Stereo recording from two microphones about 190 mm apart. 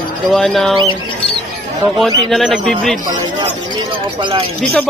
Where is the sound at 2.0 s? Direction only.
Centre (ahead or behind).